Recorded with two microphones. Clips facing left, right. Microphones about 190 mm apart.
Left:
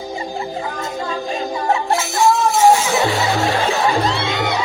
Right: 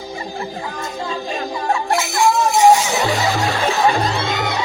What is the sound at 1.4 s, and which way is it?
Music, 20° left (ahead or behind).